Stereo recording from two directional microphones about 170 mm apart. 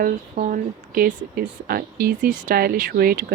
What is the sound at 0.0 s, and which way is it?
Speech, 50° right (ahead or behind).